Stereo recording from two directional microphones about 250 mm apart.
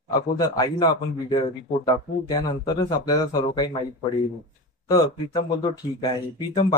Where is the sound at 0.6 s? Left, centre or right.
Centre.